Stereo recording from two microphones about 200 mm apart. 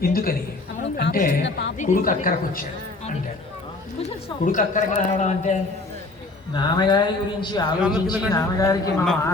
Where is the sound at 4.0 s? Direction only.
40° left (ahead or behind).